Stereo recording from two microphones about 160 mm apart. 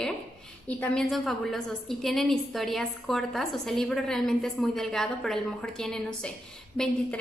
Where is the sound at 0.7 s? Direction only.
5° left (ahead or behind).